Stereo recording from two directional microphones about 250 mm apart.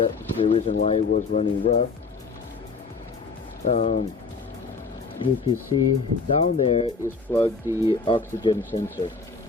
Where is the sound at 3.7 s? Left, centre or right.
Left.